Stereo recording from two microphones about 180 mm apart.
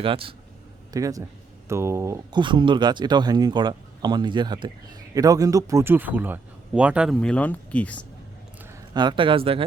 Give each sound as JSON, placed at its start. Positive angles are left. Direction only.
{"t": 0.0, "sound": "speech", "side_deg": -30}
{"t": 0.9, "sound": "speech", "side_deg": -20}
{"t": 8.9, "sound": "speech", "side_deg": -25}